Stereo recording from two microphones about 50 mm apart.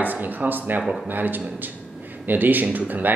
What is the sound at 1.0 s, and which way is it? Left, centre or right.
Speech, right.